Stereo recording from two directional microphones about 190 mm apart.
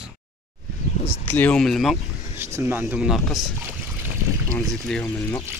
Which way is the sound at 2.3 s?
15° right (ahead or behind).